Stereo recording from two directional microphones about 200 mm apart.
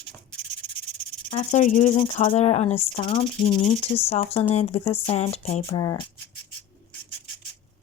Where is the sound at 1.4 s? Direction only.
35° left (ahead or behind); by 6.0 s 20° left (ahead or behind).